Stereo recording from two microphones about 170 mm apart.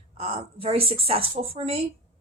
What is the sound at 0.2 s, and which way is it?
A woman's voice, 35° right (ahead or behind).